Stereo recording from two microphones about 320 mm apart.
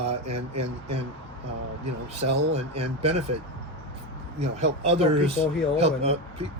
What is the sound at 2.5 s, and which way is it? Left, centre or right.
Speech, centre.